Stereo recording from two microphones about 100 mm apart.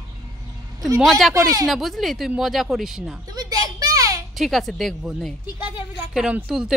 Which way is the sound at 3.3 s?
40° right (ahead or behind).